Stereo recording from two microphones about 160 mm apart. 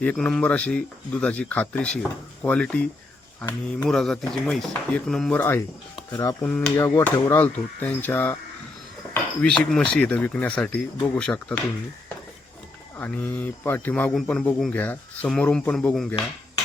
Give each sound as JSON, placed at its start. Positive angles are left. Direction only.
{"t": 0.0, "sound": "a man's voice", "side_deg": 5}
{"t": 3.8, "sound": "speech", "side_deg": 5}
{"t": 6.5, "sound": "speech", "side_deg": 5}
{"t": 6.7, "sound": "a man's voice", "side_deg": 20}
{"t": 9.4, "sound": "speech", "side_deg": 5}
{"t": 13.0, "sound": "a man's voice", "side_deg": 10}